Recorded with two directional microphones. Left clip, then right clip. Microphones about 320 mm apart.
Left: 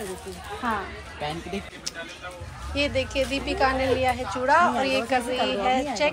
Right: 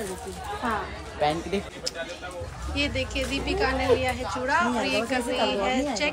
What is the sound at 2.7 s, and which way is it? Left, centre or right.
Speech, centre.